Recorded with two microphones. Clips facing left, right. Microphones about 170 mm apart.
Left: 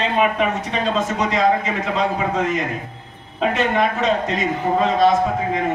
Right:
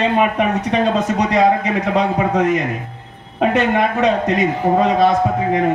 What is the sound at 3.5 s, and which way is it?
A man's voice, 60° right (ahead or behind).